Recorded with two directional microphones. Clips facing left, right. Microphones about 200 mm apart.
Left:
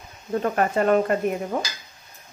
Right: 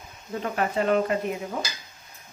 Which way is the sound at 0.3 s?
50° left (ahead or behind).